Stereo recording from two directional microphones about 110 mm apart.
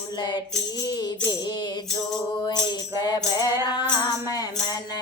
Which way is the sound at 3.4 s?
40° left (ahead or behind).